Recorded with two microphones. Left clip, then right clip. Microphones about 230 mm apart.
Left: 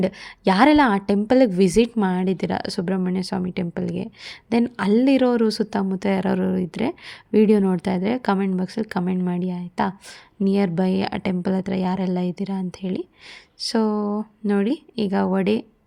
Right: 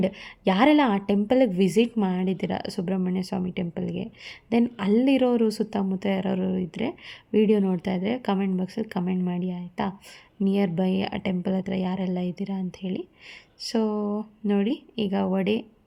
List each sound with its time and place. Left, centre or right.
0.0 s a woman's voice: left